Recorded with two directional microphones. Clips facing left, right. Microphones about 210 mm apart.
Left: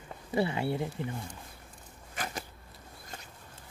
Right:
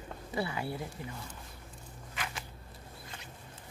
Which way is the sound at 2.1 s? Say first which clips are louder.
Left 4 dB; 40° left (ahead or behind).